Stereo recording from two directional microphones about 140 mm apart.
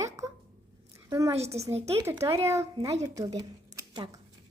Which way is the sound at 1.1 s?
20° right (ahead or behind).